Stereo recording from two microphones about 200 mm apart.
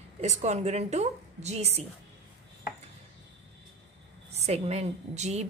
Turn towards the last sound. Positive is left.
turn(degrees=-35)  # may be behind; listen again after turning